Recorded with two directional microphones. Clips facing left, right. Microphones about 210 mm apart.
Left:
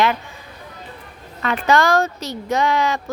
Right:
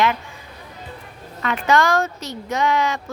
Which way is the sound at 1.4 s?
35° left (ahead or behind).